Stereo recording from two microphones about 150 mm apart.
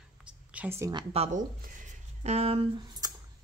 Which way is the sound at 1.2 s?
45° right (ahead or behind).